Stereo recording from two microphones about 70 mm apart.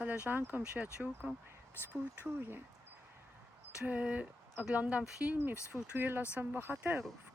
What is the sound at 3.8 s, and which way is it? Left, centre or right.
Speech, right.